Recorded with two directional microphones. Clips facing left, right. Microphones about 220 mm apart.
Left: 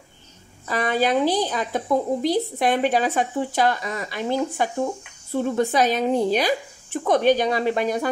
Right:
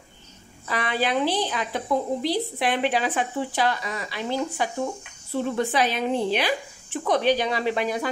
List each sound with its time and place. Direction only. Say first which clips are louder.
0.7 s a woman's voice: left 4 dB; 45° left (ahead or behind)